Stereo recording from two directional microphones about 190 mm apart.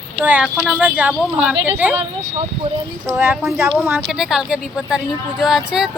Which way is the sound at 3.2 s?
10° right (ahead or behind).